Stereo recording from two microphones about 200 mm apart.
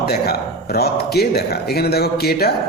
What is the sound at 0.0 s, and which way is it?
A man's voice, 50° left (ahead or behind).